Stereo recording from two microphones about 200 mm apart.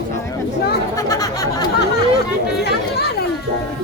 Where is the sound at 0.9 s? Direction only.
15° left (ahead or behind).